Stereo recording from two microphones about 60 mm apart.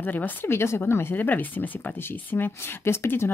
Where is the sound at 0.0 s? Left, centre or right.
Left.